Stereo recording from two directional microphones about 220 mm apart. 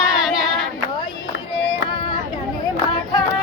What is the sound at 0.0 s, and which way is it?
Child singing, centre (ahead or behind).